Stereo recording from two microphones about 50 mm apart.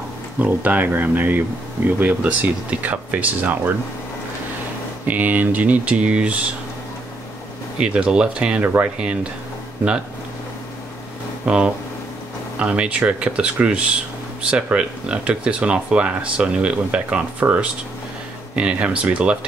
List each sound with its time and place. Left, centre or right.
0.4 s speech: right
5.0 s speech: right
7.8 s speech: centre
11.4 s speech: centre
18.5 s speech: right